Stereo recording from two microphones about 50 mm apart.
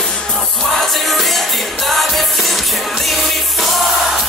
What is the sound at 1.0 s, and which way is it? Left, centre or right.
Music, centre.